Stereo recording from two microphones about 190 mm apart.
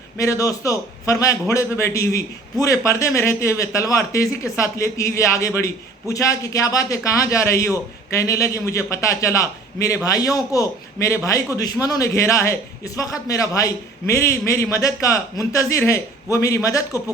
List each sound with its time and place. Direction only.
0.2 s a man's voice: 15° left (ahead or behind)